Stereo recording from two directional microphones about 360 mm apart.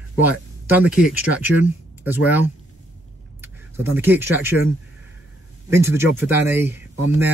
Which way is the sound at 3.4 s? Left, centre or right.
Centre.